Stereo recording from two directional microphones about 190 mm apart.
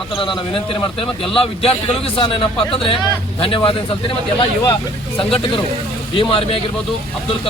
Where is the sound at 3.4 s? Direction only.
30° left (ahead or behind).